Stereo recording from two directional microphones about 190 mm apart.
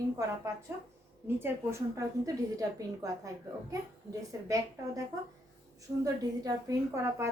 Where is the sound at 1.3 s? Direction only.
10° right (ahead or behind).